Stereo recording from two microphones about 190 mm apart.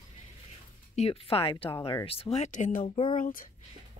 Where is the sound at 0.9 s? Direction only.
30° left (ahead or behind); by 3.4 s 45° left (ahead or behind).